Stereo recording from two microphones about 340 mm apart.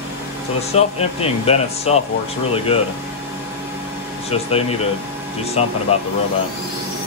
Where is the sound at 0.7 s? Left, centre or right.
Centre.